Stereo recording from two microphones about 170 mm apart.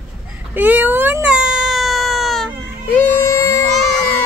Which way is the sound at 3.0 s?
15° left (ahead or behind).